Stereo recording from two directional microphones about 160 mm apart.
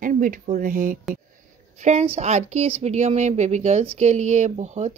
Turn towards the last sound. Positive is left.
turn(degrees=-45)  # may be behind; listen again after turning